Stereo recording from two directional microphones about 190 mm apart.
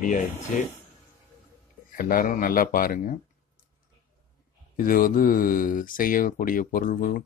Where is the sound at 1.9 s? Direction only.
45° left (ahead or behind).